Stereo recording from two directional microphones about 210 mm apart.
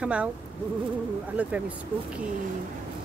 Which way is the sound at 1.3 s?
5° right (ahead or behind).